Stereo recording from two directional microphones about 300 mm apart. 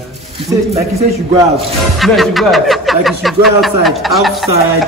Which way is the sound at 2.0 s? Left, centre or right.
Centre.